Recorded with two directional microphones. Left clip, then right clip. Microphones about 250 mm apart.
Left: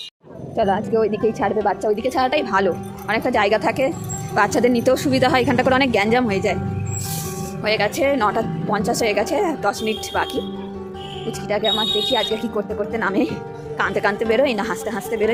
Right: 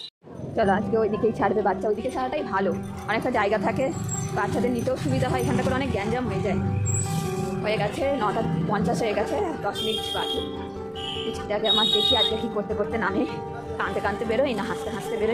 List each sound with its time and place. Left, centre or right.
0.5 s speech: centre
2.1 s a woman's voice: left
7.6 s a woman's voice: left
9.6 s a woman's voice: left
11.3 s a woman's voice: centre